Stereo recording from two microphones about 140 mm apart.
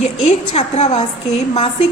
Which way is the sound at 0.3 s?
50° left (ahead or behind).